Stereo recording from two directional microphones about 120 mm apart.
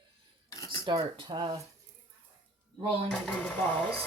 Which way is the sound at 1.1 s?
40° right (ahead or behind).